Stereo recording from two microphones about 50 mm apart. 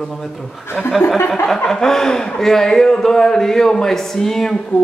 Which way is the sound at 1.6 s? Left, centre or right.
Centre.